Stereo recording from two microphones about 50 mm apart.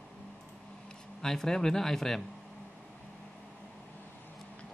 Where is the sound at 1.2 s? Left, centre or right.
Centre.